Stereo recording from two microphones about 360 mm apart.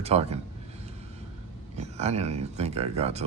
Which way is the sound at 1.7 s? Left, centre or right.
Centre.